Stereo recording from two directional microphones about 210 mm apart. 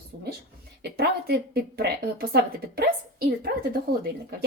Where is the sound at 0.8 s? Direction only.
50° right (ahead or behind).